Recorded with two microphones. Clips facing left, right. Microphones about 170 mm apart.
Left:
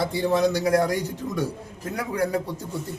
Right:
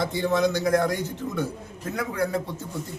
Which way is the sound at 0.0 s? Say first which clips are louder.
Left 1 dB; 10° left (ahead or behind).